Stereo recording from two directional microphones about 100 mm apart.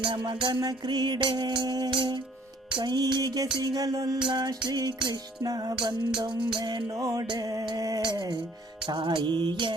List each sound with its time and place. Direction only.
0.0 s music: 50° right (ahead or behind); by 4.2 s 35° right (ahead or behind)
4.2 s music: 50° right (ahead or behind)
5.8 s music: 55° right (ahead or behind)
6.9 s music: 35° right (ahead or behind)
8.0 s music: 45° right (ahead or behind)